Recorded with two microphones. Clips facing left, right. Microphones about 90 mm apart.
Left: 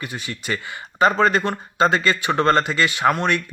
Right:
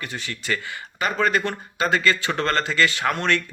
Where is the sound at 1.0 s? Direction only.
30° left (ahead or behind).